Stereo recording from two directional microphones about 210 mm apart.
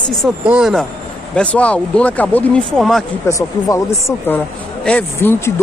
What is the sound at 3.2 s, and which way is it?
Speech, 15° left (ahead or behind).